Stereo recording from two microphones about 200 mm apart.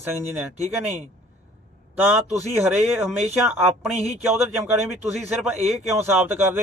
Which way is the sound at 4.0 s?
30° right (ahead or behind).